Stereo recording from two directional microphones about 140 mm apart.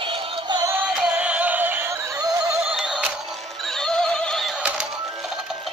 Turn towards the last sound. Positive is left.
turn(degrees=5)  # may be behind; listen again after turning